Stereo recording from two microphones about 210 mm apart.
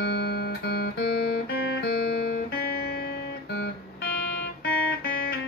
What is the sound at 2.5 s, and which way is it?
Guitar, 45° left (ahead or behind).